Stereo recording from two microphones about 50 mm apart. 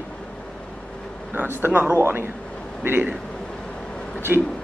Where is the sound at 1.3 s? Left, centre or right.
Right.